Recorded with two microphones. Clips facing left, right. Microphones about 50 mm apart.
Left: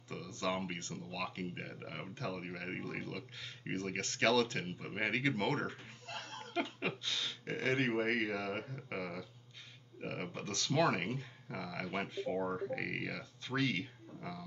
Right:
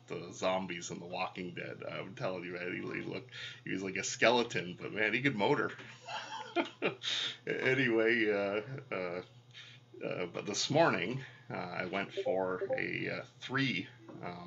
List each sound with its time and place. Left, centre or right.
0.1 s speech: centre